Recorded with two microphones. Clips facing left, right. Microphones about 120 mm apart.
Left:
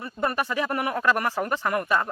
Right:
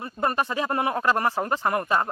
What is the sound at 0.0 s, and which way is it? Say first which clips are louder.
A man's voice: right 1 dB; 30° right (ahead or behind).